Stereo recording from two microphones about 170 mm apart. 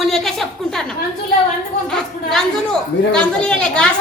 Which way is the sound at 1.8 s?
5° left (ahead or behind).